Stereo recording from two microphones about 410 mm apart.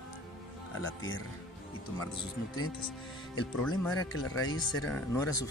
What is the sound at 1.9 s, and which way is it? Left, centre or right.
Speech, centre.